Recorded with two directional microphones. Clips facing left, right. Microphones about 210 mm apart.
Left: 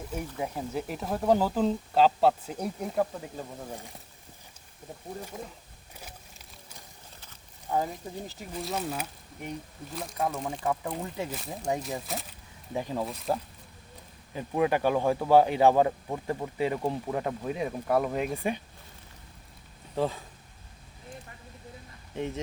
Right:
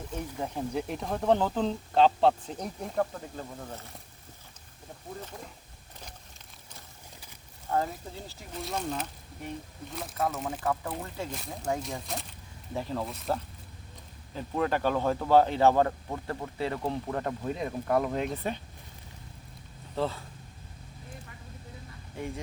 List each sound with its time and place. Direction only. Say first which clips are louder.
0.1 s speech: left 1 dB; 5° left (ahead or behind)
5.3 s speech: left 4 dB; 10° left (ahead or behind)
7.7 s speech: even; 15° left (ahead or behind)
8.6 s speech: even; 5° left (ahead or behind)
10.7 s speech: left 2 dB; 15° left (ahead or behind)
11.3 s speech: left 1 dB; 5° left (ahead or behind)
12.7 s speech: left 2 dB; 15° left (ahead or behind)
20.0 s speech: left 2 dB; 15° left (ahead or behind)
22.1 s speech: left 4 dB; 20° left (ahead or behind)